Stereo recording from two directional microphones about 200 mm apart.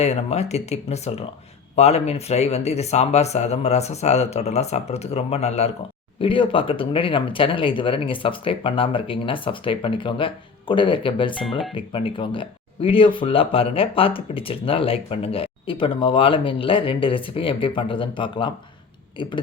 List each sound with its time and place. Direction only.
0.0 s speech: 30° left (ahead or behind)